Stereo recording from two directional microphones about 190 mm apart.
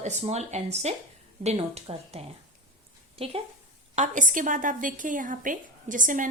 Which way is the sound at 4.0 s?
45° right (ahead or behind).